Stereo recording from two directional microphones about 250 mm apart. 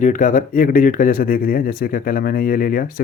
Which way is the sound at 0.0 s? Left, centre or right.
Left.